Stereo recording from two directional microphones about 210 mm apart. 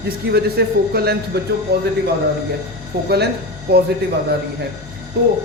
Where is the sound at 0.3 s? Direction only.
50° right (ahead or behind).